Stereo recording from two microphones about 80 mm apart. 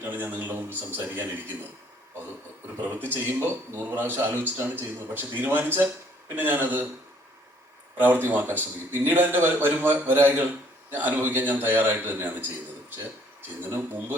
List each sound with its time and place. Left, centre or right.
0.0 s a man's voice: right
2.8 s a man's voice: right
7.9 s a man's voice: right
13.7 s speech: right